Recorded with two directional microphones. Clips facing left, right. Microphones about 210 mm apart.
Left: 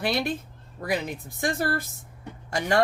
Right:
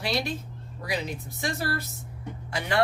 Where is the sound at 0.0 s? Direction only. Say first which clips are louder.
Left 3 dB; 55° left (ahead or behind).